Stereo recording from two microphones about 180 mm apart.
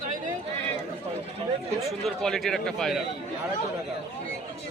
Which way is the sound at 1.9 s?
Centre (ahead or behind).